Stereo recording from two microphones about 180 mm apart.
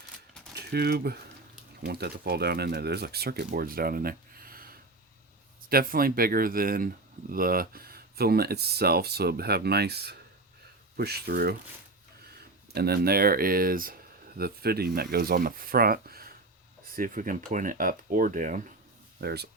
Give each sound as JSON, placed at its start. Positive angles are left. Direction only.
{"t": 0.5, "sound": "speech", "side_deg": -60}
{"t": 19.2, "sound": "speech", "side_deg": -65}